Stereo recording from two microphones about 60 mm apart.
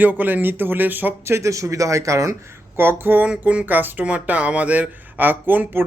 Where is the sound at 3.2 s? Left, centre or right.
Centre.